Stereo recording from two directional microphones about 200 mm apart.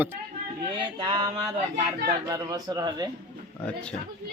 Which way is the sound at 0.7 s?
20° right (ahead or behind).